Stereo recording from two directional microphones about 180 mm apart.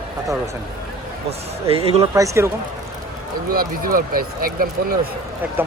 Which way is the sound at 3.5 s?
55° right (ahead or behind).